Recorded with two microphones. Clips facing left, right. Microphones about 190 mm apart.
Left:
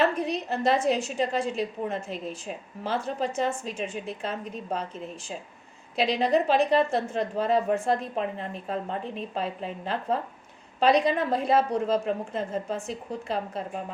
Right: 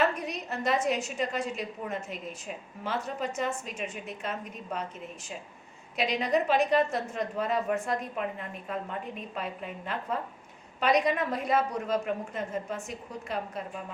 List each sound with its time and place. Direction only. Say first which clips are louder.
0.0 s a woman's voice: left 4 dB; 30° left (ahead or behind)